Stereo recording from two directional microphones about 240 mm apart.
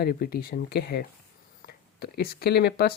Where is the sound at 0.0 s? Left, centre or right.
Left.